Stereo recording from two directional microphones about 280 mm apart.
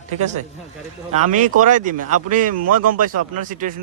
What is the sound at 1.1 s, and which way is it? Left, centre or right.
Speech, right.